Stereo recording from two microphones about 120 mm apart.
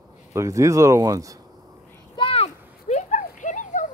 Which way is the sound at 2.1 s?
50° left (ahead or behind).